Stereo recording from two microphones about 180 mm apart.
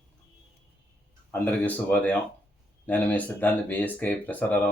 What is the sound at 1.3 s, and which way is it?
Speech, 10° left (ahead or behind).